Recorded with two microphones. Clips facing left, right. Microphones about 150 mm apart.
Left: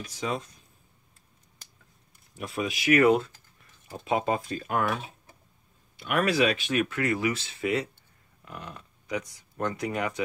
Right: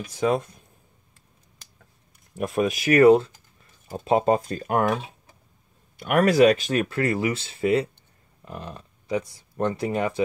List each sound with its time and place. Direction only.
0.1 s speech: 55° right (ahead or behind)
2.3 s speech: 50° right (ahead or behind)
5.9 s speech: 45° right (ahead or behind); by 10.2 s 30° right (ahead or behind)